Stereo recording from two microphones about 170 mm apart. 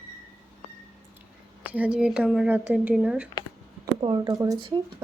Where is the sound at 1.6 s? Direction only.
10° right (ahead or behind).